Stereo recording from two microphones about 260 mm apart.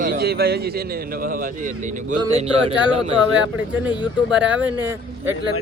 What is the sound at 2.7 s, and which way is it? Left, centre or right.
A man's voice, centre.